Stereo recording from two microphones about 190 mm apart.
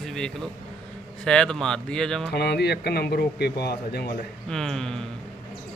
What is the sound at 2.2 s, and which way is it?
A man's voice, 60° left (ahead or behind).